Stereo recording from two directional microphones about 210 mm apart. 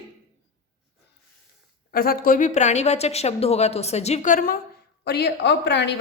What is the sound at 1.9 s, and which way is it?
Speech, 45° left (ahead or behind).